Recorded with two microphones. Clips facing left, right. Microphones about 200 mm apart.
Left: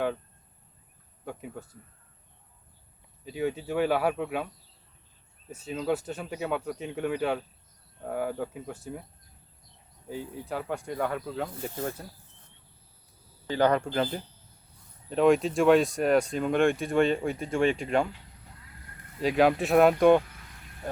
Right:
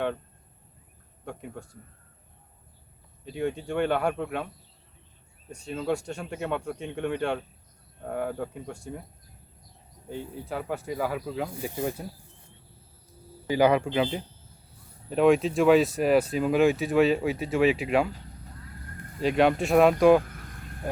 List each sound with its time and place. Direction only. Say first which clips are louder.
1.2 s speech: even; centre (ahead or behind)
3.2 s speech: even; centre (ahead or behind)
5.5 s speech: even; 5° left (ahead or behind)
10.1 s speech: even; 5° left (ahead or behind)
13.5 s speech: right 3 dB; 10° right (ahead or behind)
19.2 s speech: right 1 dB; centre (ahead or behind)
20.2 s vehicle: right 7 dB; 50° right (ahead or behind)